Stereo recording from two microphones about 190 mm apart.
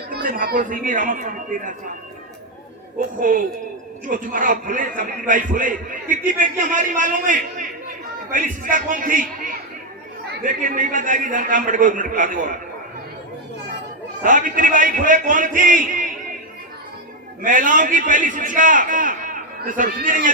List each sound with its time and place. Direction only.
0.3 s a man's voice: 45° right (ahead or behind)
3.2 s a man's voice: 45° right (ahead or behind)
14.2 s a man's voice: 45° right (ahead or behind)
17.4 s a man's voice: 45° right (ahead or behind)